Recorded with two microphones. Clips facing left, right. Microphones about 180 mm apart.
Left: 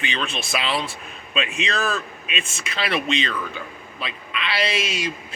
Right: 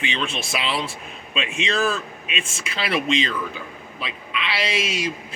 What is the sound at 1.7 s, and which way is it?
Speech, 40° left (ahead or behind).